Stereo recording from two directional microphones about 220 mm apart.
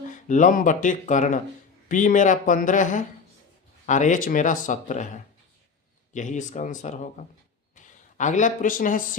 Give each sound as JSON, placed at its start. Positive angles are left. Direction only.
{"t": 0.1, "sound": "speech", "side_deg": 35}